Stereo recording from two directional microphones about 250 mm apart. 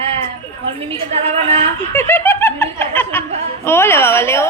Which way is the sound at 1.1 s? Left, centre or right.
Right.